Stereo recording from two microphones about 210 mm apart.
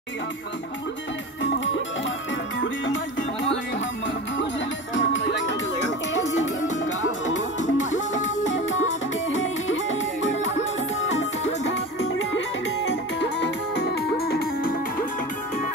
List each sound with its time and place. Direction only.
1.4 s music: 65° left (ahead or behind)
4.9 s music: 65° left (ahead or behind)
7.5 s music: 35° left (ahead or behind)
9.3 s music: 65° left (ahead or behind)
11.6 s music: 60° left (ahead or behind)